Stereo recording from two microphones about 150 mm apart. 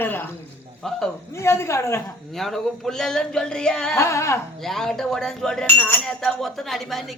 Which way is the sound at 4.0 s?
20° left (ahead or behind).